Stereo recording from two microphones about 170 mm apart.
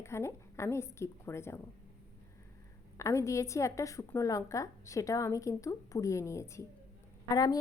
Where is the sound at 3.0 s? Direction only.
15° left (ahead or behind).